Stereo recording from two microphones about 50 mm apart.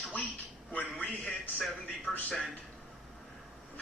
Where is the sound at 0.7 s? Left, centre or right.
Left.